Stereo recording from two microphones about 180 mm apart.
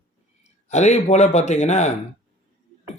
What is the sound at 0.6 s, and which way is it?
A man's voice, 40° left (ahead or behind).